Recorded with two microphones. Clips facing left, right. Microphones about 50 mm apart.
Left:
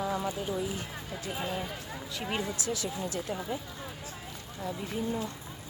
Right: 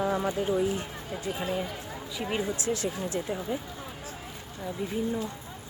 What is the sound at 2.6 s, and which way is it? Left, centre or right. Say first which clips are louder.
Speech: right 4 dB; right.